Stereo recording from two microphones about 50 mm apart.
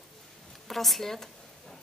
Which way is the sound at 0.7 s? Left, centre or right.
Centre.